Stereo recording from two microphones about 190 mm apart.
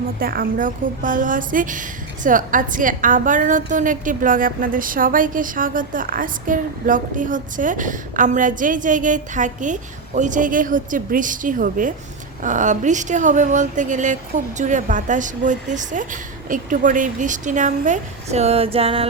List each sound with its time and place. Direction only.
0.2 s a woman's voice: 50° right (ahead or behind); by 19.0 s 30° right (ahead or behind)